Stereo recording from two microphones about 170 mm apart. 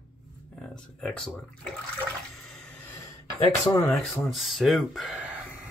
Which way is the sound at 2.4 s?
Centre (ahead or behind).